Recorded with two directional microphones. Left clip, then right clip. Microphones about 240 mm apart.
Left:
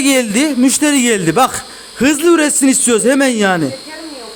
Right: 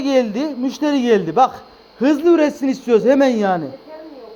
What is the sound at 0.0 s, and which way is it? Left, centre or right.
Speech, left.